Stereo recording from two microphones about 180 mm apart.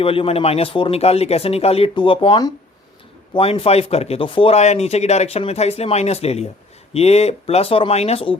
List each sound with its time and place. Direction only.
0.0 s speech: 30° left (ahead or behind)